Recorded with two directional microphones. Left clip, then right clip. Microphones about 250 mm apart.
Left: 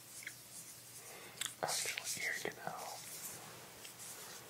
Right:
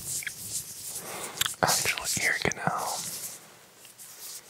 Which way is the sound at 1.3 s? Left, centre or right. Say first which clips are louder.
Right 14 dB; right.